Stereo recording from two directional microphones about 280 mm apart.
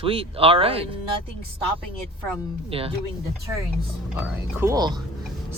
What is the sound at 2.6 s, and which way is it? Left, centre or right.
Speech, centre.